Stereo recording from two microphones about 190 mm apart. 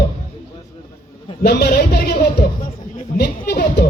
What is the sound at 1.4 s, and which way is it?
A woman's voice, 60° left (ahead or behind).